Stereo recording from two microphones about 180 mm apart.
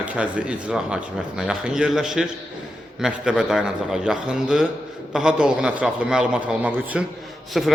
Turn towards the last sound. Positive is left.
turn(degrees=0)  # may be behind; listen again after turning